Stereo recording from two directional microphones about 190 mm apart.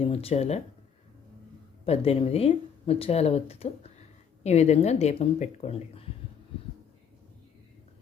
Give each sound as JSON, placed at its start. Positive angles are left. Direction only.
{"t": 0.0, "sound": "speech", "side_deg": 30}
{"t": 1.8, "sound": "speech", "side_deg": 30}